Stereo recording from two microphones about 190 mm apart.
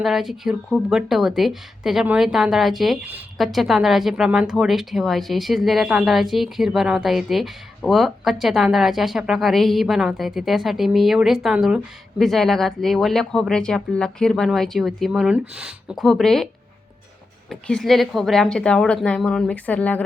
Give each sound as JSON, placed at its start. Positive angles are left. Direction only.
{"t": 0.0, "sound": "a woman's voice", "side_deg": 0}
{"t": 17.5, "sound": "a woman's voice", "side_deg": 0}